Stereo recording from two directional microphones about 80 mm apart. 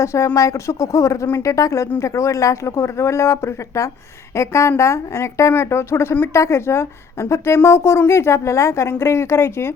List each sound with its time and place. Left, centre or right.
0.0 s a woman's voice: left